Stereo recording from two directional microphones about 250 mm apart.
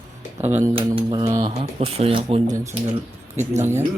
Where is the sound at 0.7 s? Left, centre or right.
Right.